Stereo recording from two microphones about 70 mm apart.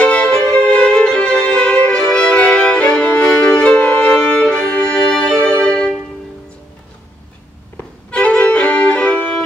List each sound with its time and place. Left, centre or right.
0.0 s violin: centre
8.1 s violin: centre